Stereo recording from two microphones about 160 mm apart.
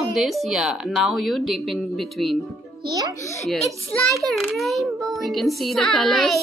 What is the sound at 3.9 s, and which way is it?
A woman's voice, centre (ahead or behind).